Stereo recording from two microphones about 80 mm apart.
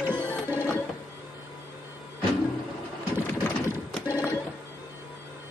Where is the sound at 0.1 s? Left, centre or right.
Right.